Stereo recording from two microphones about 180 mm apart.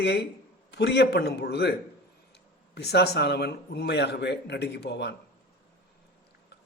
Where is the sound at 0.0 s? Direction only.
70° left (ahead or behind).